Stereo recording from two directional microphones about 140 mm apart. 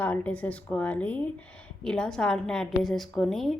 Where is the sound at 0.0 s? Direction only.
10° left (ahead or behind).